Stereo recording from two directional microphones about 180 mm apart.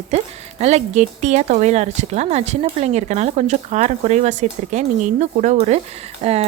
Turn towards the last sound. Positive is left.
turn(degrees=-35)  # may be behind; listen again after turning